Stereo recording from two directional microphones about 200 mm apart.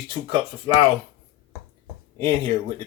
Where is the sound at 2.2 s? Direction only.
25° right (ahead or behind).